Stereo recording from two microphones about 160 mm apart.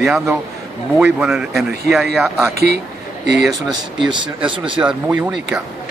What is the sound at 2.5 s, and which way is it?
Speech, 90° right.